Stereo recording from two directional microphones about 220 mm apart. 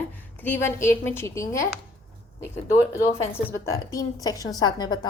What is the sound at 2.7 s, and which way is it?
A woman's voice, 10° left (ahead or behind).